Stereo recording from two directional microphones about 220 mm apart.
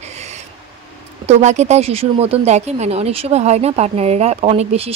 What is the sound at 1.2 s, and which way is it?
Speech, 30° right (ahead or behind).